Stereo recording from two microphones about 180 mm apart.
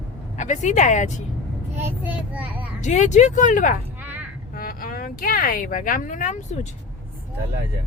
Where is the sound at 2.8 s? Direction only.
40° left (ahead or behind).